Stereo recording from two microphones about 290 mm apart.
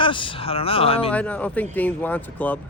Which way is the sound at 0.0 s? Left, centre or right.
Centre.